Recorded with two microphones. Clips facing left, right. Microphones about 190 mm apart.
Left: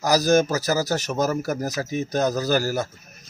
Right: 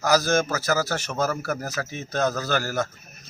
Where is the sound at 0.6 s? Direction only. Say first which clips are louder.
Left 2 dB; 35° left (ahead or behind).